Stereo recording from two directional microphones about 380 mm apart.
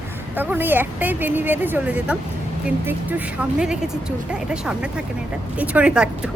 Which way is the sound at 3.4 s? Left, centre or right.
Centre.